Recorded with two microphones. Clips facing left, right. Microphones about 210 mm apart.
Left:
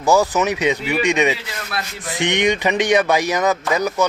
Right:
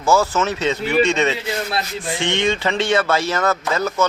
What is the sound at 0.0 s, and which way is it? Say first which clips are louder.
Speech: left 1 dB; 15° left (ahead or behind).